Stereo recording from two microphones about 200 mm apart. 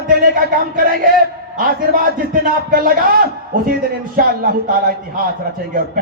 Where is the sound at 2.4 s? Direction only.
45° right (ahead or behind).